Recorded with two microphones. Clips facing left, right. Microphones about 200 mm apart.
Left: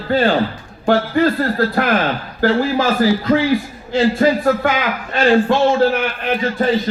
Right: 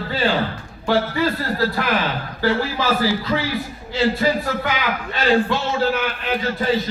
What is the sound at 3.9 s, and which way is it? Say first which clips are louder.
A man's voice: left 5 dB; 50° left (ahead or behind).